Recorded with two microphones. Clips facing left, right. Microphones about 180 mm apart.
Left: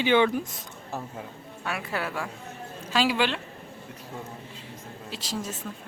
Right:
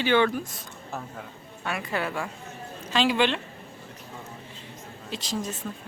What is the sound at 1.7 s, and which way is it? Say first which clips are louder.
A woman's voice: right 2 dB; 5° left (ahead or behind).